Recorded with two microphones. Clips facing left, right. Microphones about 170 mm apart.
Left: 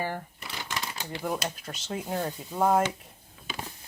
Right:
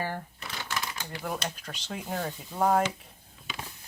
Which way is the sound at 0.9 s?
25° left (ahead or behind).